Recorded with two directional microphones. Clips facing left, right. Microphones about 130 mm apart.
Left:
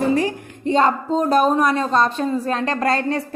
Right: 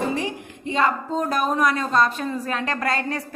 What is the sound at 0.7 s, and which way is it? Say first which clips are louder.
A woman's voice: left 5 dB; 30° left (ahead or behind).